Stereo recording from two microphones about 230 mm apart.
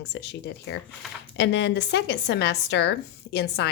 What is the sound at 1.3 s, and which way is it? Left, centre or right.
A woman's voice, left.